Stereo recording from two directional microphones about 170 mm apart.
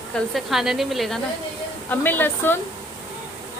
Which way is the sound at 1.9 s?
10° left (ahead or behind).